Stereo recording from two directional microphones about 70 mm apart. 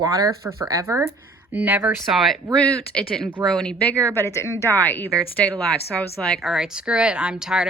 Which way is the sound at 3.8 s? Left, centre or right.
Left.